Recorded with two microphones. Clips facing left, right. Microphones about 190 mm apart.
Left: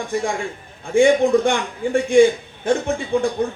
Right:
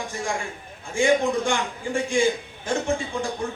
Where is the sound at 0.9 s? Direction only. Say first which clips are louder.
Left 7 dB; 60° left (ahead or behind).